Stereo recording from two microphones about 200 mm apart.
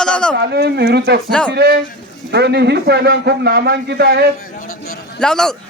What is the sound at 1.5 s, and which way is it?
A man's voice, 55° right (ahead or behind).